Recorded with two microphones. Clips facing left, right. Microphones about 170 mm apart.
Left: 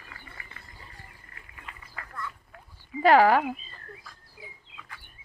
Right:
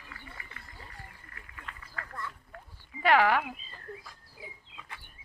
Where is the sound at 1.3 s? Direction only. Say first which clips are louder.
Right 1 dB; 25° left (ahead or behind).